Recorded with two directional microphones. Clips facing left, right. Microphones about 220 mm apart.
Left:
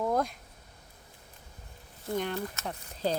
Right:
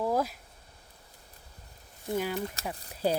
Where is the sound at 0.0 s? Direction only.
5° right (ahead or behind).